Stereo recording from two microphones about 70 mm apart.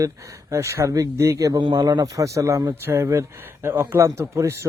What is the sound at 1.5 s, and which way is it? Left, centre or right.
Speech, right.